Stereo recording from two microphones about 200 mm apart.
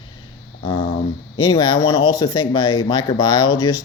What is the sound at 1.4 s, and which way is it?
Speech, 20° left (ahead or behind).